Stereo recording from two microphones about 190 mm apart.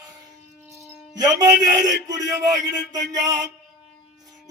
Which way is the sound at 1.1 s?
20° right (ahead or behind).